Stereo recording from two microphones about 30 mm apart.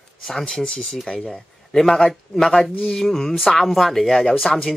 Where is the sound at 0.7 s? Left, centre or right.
Left.